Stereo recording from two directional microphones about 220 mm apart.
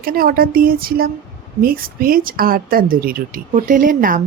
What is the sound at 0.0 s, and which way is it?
Speech, 40° right (ahead or behind).